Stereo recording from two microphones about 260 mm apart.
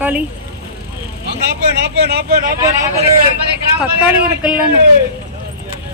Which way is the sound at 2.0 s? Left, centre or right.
Right.